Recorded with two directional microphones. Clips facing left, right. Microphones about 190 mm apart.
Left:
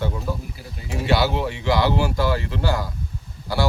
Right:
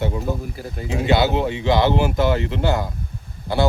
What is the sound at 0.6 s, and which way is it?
Speech, 50° right (ahead or behind).